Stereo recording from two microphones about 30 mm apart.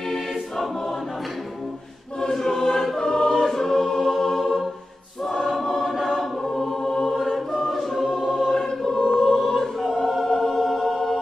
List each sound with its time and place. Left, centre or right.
2.1 s choir: centre
6.4 s choir: centre
7.2 s choir: centre
8.5 s choir: centre
9.1 s choir: centre